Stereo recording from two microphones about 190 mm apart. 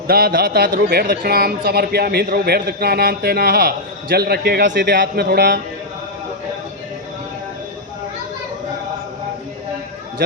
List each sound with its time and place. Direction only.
0.1 s speech: 55° right (ahead or behind)